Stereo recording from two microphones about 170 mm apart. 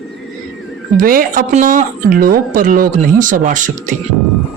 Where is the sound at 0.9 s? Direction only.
55° right (ahead or behind).